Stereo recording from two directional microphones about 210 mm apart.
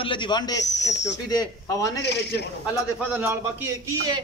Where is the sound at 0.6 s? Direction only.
55° left (ahead or behind).